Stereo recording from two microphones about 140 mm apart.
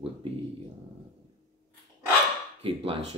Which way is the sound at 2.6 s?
40° right (ahead or behind).